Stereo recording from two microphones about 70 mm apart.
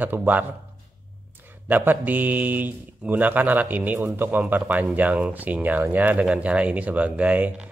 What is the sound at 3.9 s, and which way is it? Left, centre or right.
Speech, right.